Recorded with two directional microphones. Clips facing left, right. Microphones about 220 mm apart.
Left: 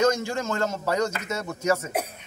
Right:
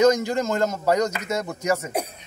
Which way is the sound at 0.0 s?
10° right (ahead or behind).